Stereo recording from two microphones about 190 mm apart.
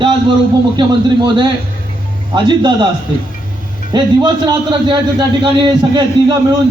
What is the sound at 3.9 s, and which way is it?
A man's voice, 25° right (ahead or behind).